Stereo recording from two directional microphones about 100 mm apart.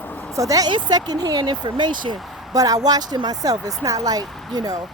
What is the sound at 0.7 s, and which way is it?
Speech, 50° right (ahead or behind).